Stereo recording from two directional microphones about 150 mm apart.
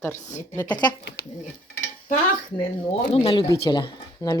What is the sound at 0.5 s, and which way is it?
Speech, 15° left (ahead or behind).